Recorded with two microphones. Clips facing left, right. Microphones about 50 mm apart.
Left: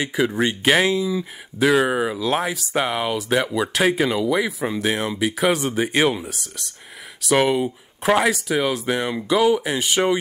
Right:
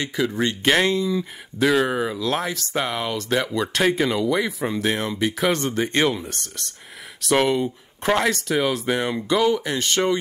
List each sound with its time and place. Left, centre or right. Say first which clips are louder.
0.0 s speech: left 2 dB; centre
0.7 s speech: left 1 dB; centre